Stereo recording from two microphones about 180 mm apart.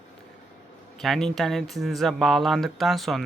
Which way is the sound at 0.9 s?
Centre (ahead or behind).